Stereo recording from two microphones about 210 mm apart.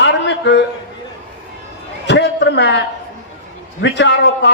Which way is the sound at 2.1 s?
55° left (ahead or behind).